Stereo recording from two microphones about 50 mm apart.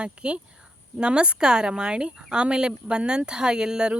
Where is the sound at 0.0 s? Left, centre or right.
Right.